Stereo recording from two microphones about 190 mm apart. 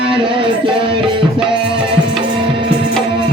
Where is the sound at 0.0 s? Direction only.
25° right (ahead or behind).